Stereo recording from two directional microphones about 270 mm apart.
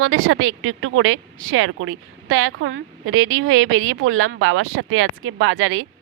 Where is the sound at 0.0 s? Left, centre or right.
Right.